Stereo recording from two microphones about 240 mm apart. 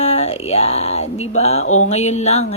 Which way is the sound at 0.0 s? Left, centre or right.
Left.